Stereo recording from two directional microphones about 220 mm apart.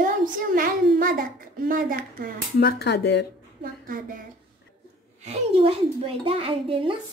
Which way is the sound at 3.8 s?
40° right (ahead or behind).